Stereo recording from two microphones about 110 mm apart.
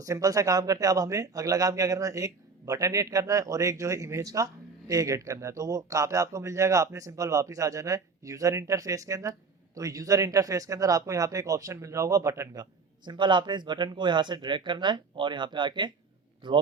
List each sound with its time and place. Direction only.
0.0 s a man's voice: 30° right (ahead or behind)
13.1 s speech: 45° right (ahead or behind)